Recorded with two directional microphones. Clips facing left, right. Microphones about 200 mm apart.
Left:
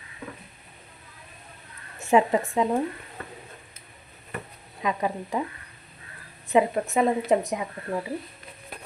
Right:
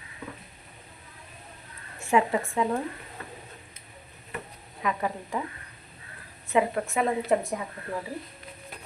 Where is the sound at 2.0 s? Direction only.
20° left (ahead or behind).